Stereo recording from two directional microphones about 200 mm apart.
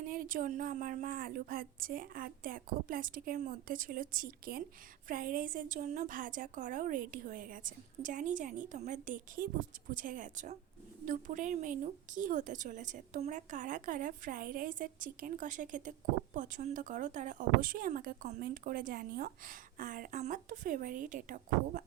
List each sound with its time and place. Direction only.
0.0 s a woman's voice: 45° right (ahead or behind)